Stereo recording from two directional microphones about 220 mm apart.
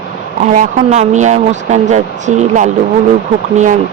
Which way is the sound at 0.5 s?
35° right (ahead or behind).